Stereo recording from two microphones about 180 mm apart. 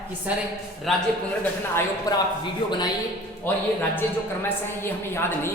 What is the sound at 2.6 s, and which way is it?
Speech, 25° left (ahead or behind).